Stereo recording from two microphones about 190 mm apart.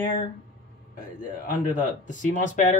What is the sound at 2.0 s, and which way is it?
Speech, 40° left (ahead or behind).